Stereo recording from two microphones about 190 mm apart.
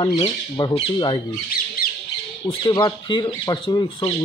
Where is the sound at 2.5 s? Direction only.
25° left (ahead or behind).